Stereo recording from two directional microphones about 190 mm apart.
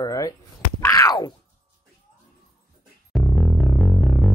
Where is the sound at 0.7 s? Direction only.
15° left (ahead or behind).